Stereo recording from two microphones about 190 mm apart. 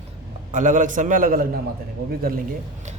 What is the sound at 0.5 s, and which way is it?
Speech, 40° right (ahead or behind).